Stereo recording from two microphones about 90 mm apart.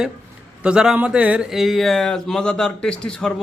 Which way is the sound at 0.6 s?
10° right (ahead or behind).